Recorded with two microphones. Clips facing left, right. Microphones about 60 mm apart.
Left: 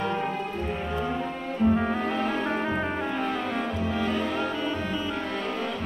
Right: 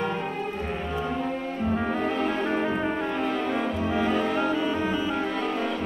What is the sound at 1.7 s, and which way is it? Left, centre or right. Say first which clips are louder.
Music: even; centre.